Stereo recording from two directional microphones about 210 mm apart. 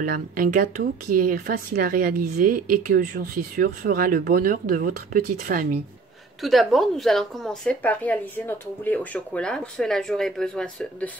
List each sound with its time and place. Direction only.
0.0 s speech: 40° right (ahead or behind)
6.4 s speech: centre (ahead or behind)